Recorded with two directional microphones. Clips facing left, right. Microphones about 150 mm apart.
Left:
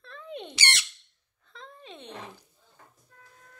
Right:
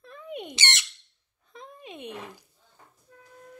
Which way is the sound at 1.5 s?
15° right (ahead or behind).